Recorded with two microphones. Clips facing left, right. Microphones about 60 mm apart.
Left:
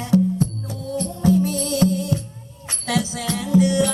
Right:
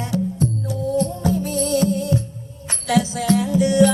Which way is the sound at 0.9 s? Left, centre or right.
Right.